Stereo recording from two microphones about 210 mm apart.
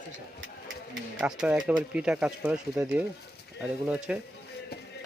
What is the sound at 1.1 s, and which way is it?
Speech, 5° right (ahead or behind).